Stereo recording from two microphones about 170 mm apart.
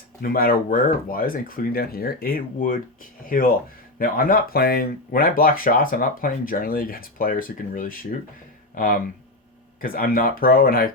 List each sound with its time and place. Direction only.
0.2 s speech: 60° left (ahead or behind)